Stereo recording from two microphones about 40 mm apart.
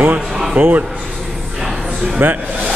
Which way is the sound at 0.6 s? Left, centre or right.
Right.